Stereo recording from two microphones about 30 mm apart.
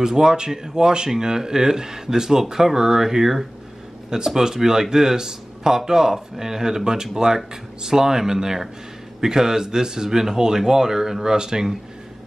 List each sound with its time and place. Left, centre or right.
0.0 s speech: centre